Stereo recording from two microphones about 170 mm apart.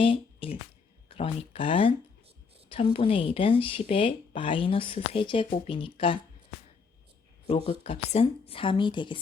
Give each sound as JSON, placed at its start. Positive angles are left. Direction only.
{"t": 0.0, "sound": "speech", "side_deg": 30}
{"t": 7.7, "sound": "speech", "side_deg": 35}